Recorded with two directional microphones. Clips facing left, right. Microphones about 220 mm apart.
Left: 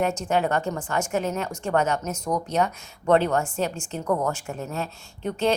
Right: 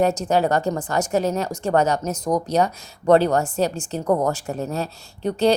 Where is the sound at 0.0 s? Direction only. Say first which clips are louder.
Right 5 dB; 35° right (ahead or behind).